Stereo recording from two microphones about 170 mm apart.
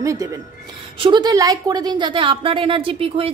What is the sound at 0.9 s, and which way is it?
A woman's voice, 30° right (ahead or behind).